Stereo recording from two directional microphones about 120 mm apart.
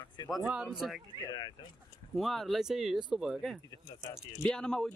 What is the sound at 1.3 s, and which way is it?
Speech, 40° left (ahead or behind).